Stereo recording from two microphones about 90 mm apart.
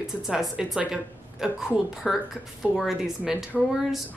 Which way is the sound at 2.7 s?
10° right (ahead or behind).